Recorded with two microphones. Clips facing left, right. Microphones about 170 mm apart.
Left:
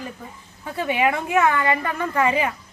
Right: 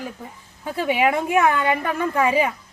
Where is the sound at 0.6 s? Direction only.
10° right (ahead or behind).